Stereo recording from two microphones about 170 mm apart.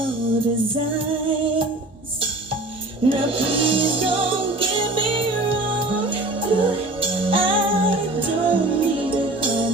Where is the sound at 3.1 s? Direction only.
30° right (ahead or behind).